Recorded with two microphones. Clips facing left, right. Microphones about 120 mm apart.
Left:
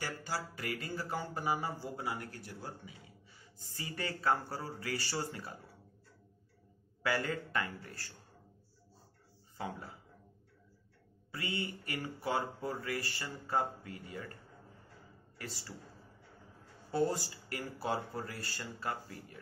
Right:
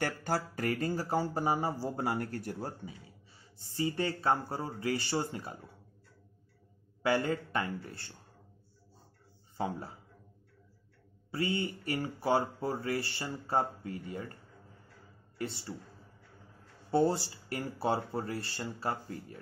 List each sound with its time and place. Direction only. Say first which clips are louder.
0.0 s speech: right 7 dB; 50° right (ahead or behind)
3.5 s speech: right 11 dB; 25° right (ahead or behind)
7.0 s speech: right 5 dB; 25° right (ahead or behind)
9.6 s speech: right 6 dB; 30° right (ahead or behind)
11.3 s speech: right 6 dB; 30° right (ahead or behind)
15.3 s speech: right 8 dB; 25° right (ahead or behind)
16.9 s speech: right 5 dB; 30° right (ahead or behind)